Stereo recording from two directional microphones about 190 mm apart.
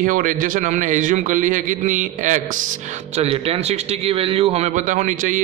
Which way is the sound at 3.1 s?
30° right (ahead or behind).